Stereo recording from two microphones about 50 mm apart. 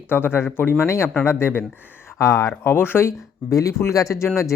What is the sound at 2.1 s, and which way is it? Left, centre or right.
Speech, left.